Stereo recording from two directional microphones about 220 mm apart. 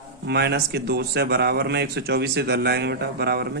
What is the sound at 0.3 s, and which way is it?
Speech, 50° right (ahead or behind).